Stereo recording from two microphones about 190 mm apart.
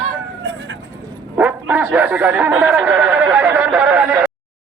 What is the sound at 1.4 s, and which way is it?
Bow-wow, 10° right (ahead or behind).